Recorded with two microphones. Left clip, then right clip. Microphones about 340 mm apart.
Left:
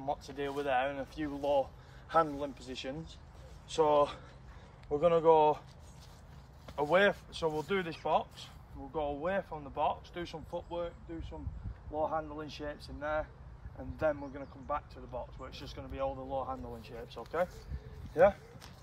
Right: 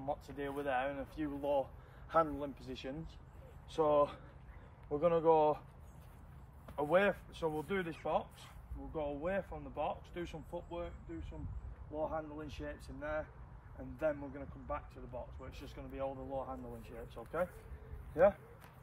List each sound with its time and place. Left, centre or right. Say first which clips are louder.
0.0 s speech: left 4 dB; left
6.6 s speech: left 4 dB; left